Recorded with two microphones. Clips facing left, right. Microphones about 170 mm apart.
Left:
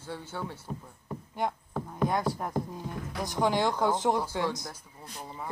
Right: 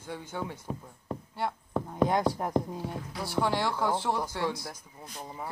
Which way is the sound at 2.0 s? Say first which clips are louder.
Right 1 dB; 20° right (ahead or behind).